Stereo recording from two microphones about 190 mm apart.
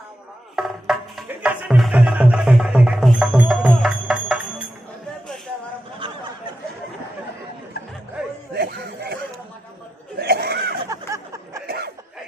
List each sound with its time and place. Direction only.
0.5 s music: centre (ahead or behind)
8.2 s chuckle: 5° right (ahead or behind)
8.5 s snicker: 55° right (ahead or behind)
10.2 s a sound: 55° right (ahead or behind)
10.8 s a sound: 15° right (ahead or behind)
11.6 s cough: 55° right (ahead or behind)